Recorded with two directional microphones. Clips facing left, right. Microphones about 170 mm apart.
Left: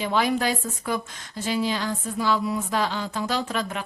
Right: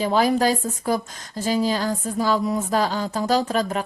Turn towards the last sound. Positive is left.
turn(degrees=-40)  # may be behind; listen again after turning